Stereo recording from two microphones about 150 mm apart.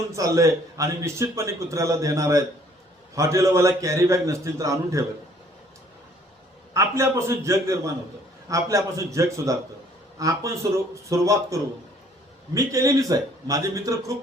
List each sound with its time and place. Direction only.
0.1 s a man's voice: 20° right (ahead or behind)
6.7 s a man's voice: 20° right (ahead or behind)